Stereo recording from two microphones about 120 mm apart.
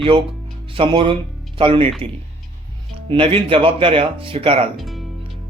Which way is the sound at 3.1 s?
50° right (ahead or behind).